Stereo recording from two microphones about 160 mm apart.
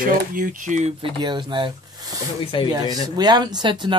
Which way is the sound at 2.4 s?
35° left (ahead or behind).